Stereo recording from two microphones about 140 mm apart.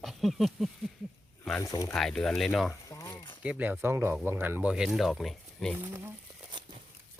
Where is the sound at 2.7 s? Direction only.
20° left (ahead or behind).